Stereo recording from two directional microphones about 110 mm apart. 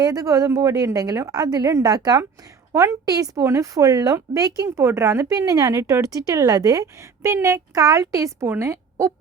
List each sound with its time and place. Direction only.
0.0 s speech: 35° right (ahead or behind)